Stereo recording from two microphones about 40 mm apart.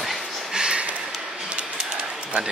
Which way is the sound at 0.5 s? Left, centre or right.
Right.